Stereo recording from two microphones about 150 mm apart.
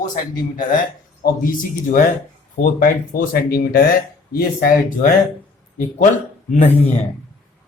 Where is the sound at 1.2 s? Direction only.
70° left (ahead or behind).